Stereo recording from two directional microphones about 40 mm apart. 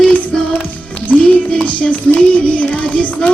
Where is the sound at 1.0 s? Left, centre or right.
Left.